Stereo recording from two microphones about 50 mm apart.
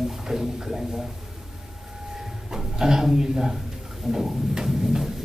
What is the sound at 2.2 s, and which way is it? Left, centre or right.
Speech, centre.